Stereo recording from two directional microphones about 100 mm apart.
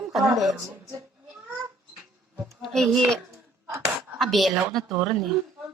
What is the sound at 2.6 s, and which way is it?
Speech, centre (ahead or behind).